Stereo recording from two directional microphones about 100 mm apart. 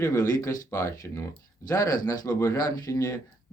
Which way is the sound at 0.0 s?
35° left (ahead or behind).